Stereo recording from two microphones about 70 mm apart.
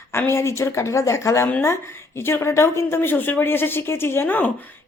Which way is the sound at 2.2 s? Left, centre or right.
Left.